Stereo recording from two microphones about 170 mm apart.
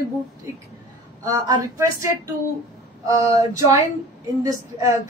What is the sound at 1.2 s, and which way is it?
Speech, 25° right (ahead or behind).